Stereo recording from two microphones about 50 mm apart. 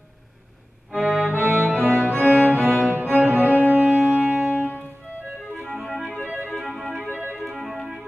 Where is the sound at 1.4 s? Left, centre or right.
Right.